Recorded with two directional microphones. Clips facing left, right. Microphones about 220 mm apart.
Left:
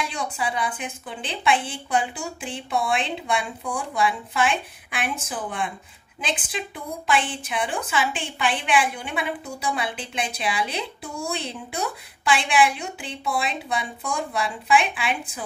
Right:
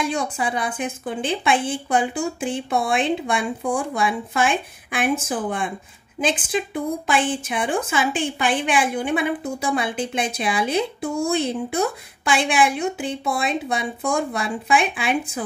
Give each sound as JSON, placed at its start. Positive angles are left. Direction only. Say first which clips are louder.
{"t": 0.0, "sound": "a woman's voice", "louder": "right 5 dB", "side_deg": -45}